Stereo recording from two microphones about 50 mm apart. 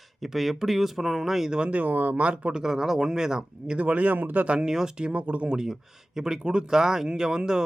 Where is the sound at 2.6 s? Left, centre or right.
Centre.